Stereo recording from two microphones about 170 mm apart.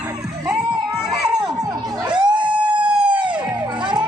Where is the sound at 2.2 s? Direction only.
25° right (ahead or behind).